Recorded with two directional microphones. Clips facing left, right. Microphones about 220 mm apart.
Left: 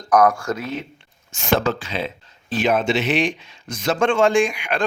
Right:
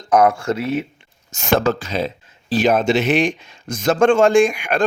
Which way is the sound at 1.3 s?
45° right (ahead or behind).